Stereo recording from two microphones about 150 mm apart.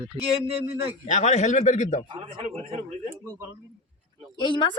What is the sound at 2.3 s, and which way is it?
Speech, 40° right (ahead or behind).